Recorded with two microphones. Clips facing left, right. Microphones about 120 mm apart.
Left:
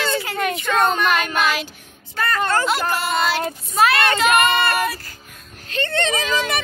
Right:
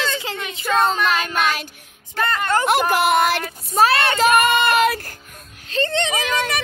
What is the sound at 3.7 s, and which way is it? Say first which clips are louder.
Speech: right 1 dB; 35° right (ahead or behind).